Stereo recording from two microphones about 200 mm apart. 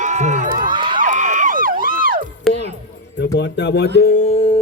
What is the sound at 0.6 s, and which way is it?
Crowd, 25° right (ahead or behind).